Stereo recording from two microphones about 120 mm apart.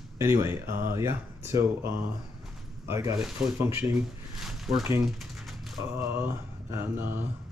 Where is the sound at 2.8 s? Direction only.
25° right (ahead or behind).